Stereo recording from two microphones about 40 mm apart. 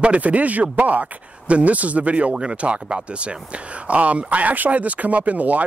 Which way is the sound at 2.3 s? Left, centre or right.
Right.